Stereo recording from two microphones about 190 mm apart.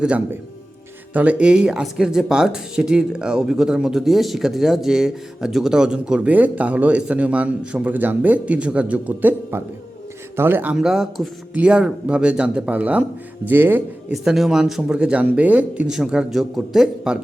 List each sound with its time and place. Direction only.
0.0 s speech: 5° right (ahead or behind)